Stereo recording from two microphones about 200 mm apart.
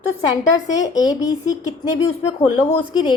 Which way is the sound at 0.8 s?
20° left (ahead or behind).